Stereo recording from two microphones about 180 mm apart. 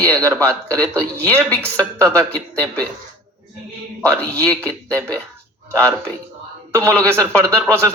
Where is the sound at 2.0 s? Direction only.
10° left (ahead or behind).